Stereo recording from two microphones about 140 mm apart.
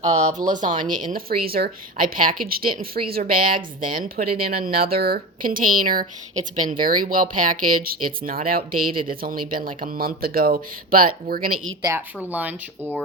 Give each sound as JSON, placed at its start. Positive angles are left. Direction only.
{"t": 0.3, "sound": "speech", "side_deg": -65}
{"t": 11.8, "sound": "a woman's voice", "side_deg": -20}